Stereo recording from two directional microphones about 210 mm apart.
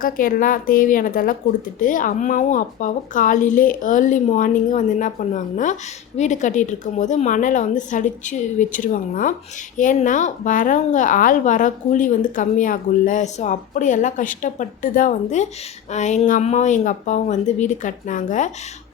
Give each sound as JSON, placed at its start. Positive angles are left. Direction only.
{"t": 0.0, "sound": "a woman's voice", "side_deg": 40}